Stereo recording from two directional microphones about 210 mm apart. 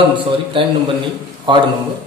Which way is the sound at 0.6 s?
25° right (ahead or behind).